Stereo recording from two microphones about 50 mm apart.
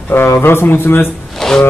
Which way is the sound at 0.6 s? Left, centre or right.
Left.